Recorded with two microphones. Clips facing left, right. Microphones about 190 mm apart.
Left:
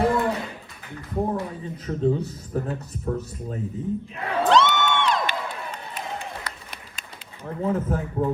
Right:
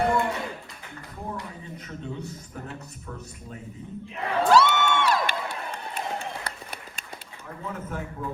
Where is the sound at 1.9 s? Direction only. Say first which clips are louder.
Left 13 dB; 35° left (ahead or behind).